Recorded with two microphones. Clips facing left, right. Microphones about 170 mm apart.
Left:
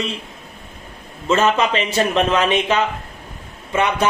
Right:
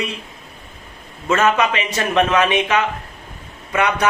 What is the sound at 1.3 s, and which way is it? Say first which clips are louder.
A man's voice: even; 30° left (ahead or behind).